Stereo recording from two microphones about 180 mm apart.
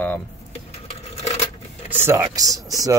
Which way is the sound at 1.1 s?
35° left (ahead or behind).